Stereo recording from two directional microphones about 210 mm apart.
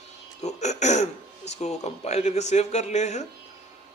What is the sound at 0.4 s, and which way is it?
Speech, 30° left (ahead or behind).